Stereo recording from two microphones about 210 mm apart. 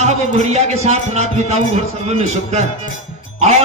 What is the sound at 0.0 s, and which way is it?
Speech, 30° right (ahead or behind).